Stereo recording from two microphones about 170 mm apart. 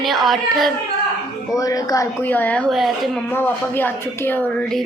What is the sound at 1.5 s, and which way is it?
Speech, 20° left (ahead or behind).